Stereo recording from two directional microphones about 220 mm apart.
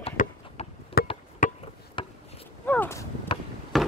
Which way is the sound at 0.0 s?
30° left (ahead or behind).